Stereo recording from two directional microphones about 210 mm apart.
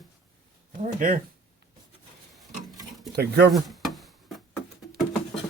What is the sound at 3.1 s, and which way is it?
Speech, 50° right (ahead or behind).